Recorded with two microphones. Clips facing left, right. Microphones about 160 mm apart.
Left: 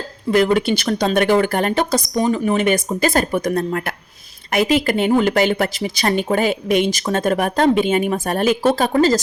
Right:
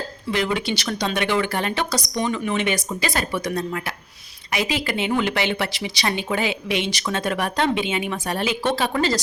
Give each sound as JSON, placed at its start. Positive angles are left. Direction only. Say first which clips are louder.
{"t": 0.3, "sound": "speech", "louder": "left 8 dB", "side_deg": 45}